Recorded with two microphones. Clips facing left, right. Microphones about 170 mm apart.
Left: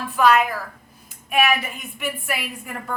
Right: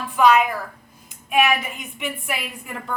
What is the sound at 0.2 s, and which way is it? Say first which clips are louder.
Speech: right 1 dB; 15° right (ahead or behind).